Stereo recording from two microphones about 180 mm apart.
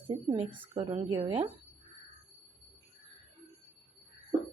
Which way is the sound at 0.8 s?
30° right (ahead or behind).